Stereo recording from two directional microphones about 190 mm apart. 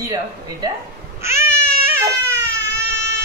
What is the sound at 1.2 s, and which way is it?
Baby cry, 15° right (ahead or behind).